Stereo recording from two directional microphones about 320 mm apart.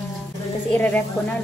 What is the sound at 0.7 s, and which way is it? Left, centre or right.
Speech, centre.